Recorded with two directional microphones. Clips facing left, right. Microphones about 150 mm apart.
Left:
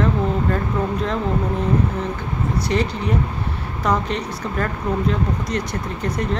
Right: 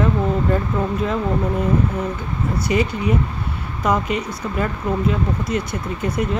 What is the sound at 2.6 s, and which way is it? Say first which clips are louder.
Speech: right 4 dB; 10° right (ahead or behind).